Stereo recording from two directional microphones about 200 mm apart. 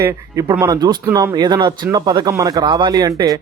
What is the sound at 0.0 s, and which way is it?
Speech, 15° right (ahead or behind).